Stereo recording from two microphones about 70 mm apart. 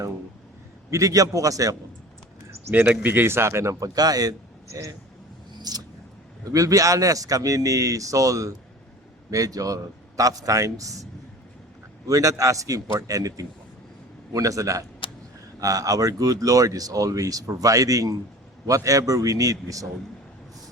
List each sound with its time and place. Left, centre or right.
0.9 s speech: right
2.8 s a man's voice: right
5.7 s vehicle: right
6.4 s a man's voice: right